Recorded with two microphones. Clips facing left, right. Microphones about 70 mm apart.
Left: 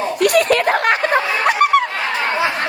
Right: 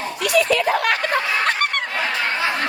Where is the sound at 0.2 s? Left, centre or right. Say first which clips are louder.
Left 4 dB; left.